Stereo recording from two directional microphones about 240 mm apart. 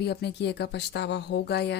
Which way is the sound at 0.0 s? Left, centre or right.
Left.